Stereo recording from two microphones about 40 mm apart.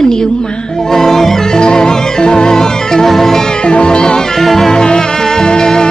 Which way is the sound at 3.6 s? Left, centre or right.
Left.